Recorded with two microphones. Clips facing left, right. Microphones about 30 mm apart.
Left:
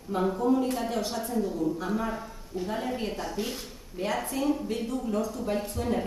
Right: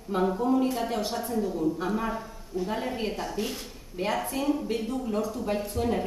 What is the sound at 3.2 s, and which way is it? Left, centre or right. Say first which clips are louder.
A woman's voice: right 1 dB; centre.